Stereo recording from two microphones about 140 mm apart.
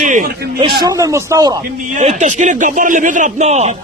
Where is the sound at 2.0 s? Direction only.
55° right (ahead or behind).